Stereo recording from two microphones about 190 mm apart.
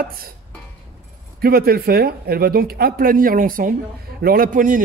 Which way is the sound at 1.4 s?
50° right (ahead or behind).